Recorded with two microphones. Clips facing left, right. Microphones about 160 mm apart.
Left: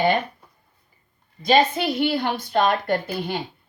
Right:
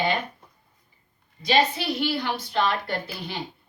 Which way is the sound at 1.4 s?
50° left (ahead or behind).